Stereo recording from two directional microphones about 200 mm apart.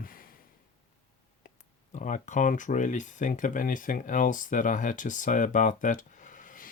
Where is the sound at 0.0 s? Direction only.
45° left (ahead or behind).